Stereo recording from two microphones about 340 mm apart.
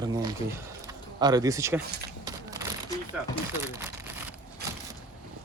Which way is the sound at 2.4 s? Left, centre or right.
Centre.